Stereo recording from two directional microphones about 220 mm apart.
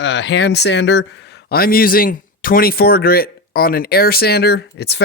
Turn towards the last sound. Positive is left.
turn(degrees=50)  # may be behind; listen again after turning